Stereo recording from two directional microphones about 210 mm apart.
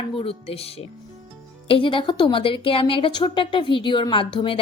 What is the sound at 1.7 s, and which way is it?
A woman's voice, 25° left (ahead or behind).